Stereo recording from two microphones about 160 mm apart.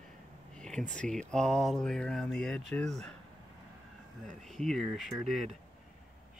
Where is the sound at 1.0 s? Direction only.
5° left (ahead or behind).